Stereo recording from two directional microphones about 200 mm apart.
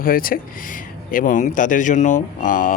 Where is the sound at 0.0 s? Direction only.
45° left (ahead or behind).